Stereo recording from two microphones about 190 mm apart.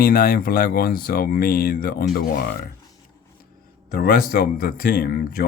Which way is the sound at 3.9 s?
55° left (ahead or behind).